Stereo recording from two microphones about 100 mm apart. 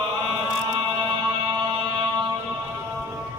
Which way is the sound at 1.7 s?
50° right (ahead or behind).